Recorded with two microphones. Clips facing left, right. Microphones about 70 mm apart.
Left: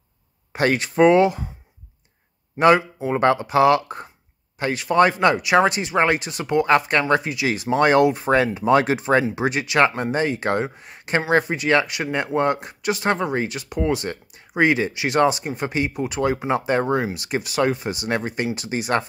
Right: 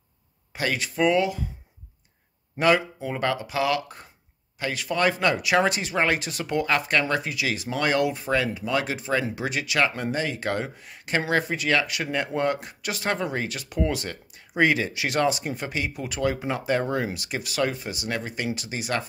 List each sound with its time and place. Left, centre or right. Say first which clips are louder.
0.5 s speech: left 7 dB; left
2.6 s speech: left 5 dB; left
3.2 s speech: left 9 dB; left
5.4 s speech: left 5 dB; centre; by 9.2 s left
9.3 s speech: left 6 dB; left
17.0 s speech: left 5 dB; centre
17.9 s speech: left 6 dB; left